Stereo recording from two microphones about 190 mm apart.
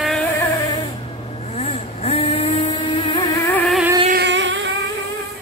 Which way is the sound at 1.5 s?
35° left (ahead or behind).